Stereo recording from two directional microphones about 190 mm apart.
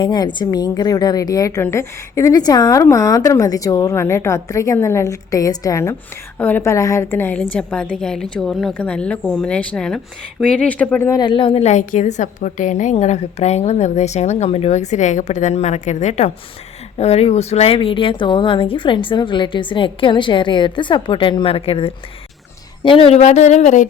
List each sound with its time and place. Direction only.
0.0 s a woman's voice: 25° left (ahead or behind)